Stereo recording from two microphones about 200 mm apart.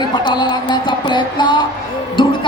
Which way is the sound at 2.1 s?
25° left (ahead or behind).